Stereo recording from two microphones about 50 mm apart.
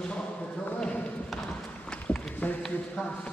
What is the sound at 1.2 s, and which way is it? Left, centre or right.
Run, centre.